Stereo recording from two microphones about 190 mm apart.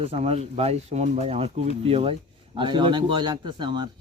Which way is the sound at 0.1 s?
35° right (ahead or behind).